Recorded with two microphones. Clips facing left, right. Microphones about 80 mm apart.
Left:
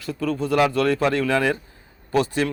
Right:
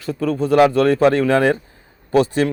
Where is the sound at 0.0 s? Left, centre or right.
Right.